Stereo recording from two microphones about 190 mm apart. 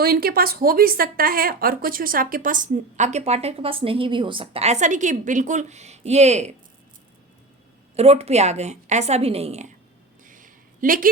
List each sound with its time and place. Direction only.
0.0 s a woman's voice: 55° right (ahead or behind); by 6.5 s 35° right (ahead or behind)
7.9 s a woman's voice: 35° right (ahead or behind)
10.2 s a sound: 45° right (ahead or behind)